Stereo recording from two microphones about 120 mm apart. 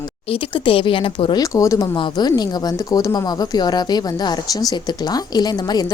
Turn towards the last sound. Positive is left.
turn(degrees=35)  # may be behind; listen again after turning